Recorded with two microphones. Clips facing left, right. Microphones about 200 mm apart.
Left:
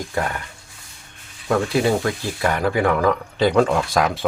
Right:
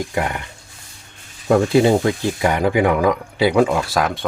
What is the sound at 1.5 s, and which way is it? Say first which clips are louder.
Speech: right 5 dB; 25° right (ahead or behind).